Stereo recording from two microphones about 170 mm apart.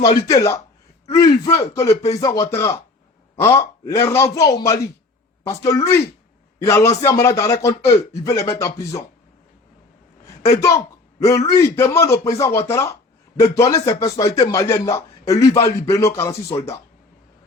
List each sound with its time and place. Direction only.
0.0 s a man's voice: 20° left (ahead or behind)
10.2 s a sound: 20° left (ahead or behind)
11.2 s a man's voice: 20° left (ahead or behind)